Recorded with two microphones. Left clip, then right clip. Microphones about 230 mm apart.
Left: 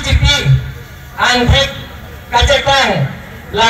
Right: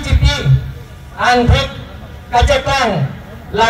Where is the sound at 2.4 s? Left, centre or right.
Right.